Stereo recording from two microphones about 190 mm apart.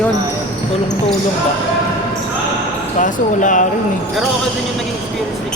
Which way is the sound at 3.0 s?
40° left (ahead or behind).